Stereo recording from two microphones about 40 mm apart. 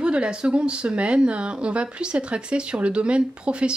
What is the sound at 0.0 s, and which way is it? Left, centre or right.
Speech, right.